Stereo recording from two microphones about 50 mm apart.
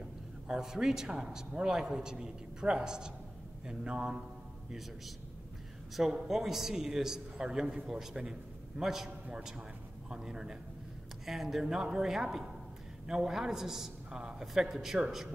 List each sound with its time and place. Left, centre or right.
0.5 s a man's voice: centre
5.9 s a man's voice: centre